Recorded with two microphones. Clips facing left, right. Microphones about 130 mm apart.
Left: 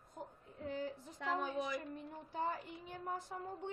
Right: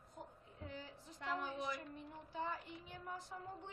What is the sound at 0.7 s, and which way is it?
Child singing, 50° left (ahead or behind).